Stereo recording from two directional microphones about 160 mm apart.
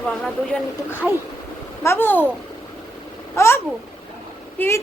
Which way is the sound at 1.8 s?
15° left (ahead or behind).